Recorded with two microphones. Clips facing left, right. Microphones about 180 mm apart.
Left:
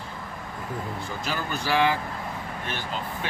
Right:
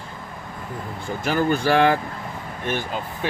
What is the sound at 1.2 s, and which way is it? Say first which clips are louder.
Speech: right 11 dB; 50° right (ahead or behind).